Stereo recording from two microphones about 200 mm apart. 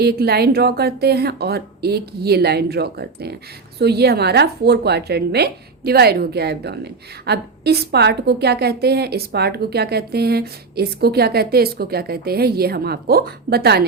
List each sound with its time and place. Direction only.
0.0 s a woman's voice: 50° right (ahead or behind)